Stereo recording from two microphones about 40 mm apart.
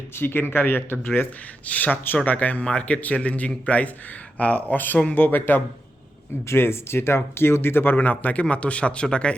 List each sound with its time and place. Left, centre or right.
0.2 s speech: left
1.6 s a man's voice: left
6.6 s speech: left
7.9 s speech: left